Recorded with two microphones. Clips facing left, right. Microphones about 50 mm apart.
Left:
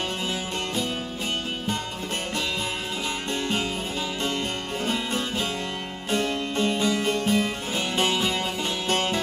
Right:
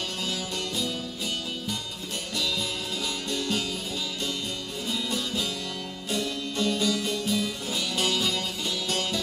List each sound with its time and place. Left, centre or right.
3.3 s music: left
4.8 s music: left